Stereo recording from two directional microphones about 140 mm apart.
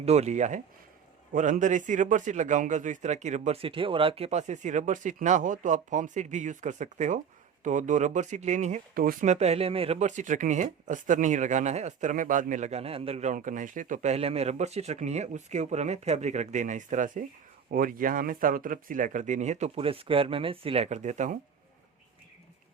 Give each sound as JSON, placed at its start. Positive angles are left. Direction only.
{"t": 0.0, "sound": "speech", "side_deg": -50}
{"t": 17.7, "sound": "speech", "side_deg": -90}